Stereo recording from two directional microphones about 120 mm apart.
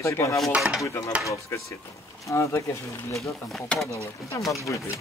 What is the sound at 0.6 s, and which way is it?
Speech, centre (ahead or behind).